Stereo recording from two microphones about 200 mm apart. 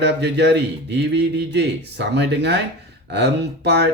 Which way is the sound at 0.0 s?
60° right (ahead or behind).